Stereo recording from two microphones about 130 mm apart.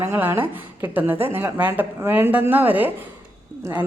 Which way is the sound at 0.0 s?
15° right (ahead or behind).